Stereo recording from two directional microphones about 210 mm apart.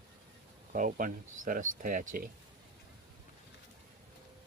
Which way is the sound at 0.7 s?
40° right (ahead or behind).